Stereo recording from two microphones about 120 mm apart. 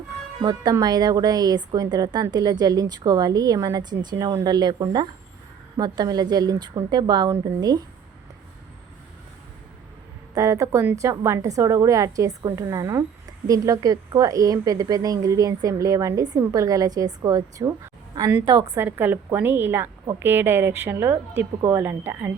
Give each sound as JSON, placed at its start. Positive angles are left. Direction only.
{"t": 0.4, "sound": "speech", "side_deg": -35}
{"t": 10.3, "sound": "a woman's voice", "side_deg": -25}
{"t": 18.8, "sound": "a woman's voice", "side_deg": -15}